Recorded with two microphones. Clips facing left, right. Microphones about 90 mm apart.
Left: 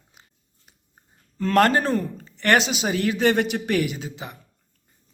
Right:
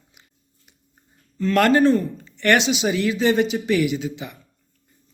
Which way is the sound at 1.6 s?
35° left (ahead or behind).